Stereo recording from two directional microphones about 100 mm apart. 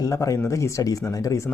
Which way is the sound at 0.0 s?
35° left (ahead or behind).